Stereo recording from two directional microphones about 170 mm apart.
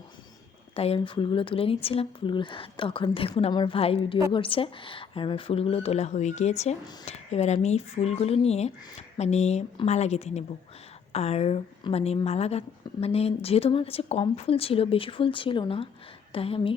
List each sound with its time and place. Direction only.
0.8 s speech: 35° left (ahead or behind)